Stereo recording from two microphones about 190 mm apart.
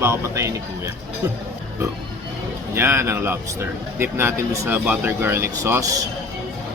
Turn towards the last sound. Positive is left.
turn(degrees=-20)  # may be behind; listen again after turning